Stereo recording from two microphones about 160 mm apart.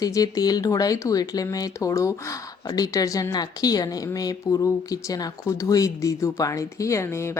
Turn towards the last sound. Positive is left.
turn(degrees=15)  # may be behind; listen again after turning